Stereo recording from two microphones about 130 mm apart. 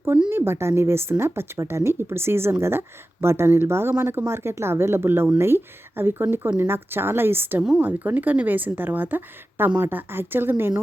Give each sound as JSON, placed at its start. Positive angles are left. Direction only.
{"t": 0.3, "sound": "a woman's voice", "side_deg": -20}